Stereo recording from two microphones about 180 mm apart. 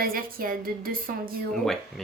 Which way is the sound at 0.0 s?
55° right (ahead or behind).